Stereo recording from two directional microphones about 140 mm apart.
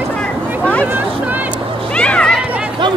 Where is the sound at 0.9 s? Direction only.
10° right (ahead or behind).